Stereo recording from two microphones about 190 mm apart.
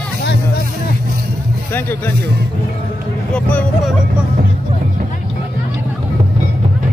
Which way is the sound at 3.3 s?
Centre (ahead or behind).